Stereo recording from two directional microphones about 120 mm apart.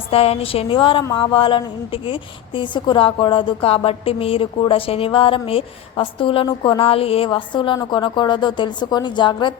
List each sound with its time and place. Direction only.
0.1 s a woman's voice: 55° left (ahead or behind); by 9.6 s 40° left (ahead or behind)